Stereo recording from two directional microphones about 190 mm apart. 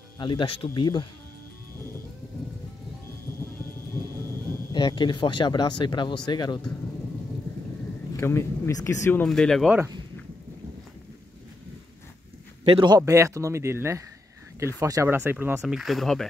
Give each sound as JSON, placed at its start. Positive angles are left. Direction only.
{"t": 0.2, "sound": "speech", "side_deg": 25}
{"t": 4.7, "sound": "speech", "side_deg": 25}
{"t": 8.2, "sound": "speech", "side_deg": 15}
{"t": 12.6, "sound": "speech", "side_deg": -25}